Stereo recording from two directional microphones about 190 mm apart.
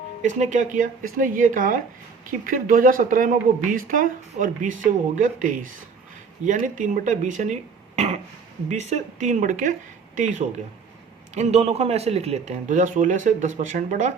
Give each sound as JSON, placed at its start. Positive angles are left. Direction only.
{"t": 0.2, "sound": "speech", "side_deg": -40}